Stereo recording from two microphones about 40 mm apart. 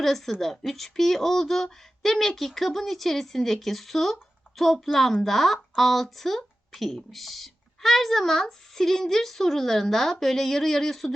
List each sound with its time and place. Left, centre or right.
0.3 s speech: centre